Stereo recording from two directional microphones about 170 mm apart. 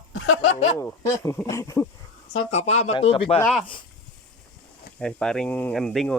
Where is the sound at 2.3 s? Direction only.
35° left (ahead or behind).